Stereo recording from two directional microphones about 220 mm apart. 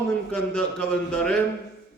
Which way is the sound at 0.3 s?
5° left (ahead or behind).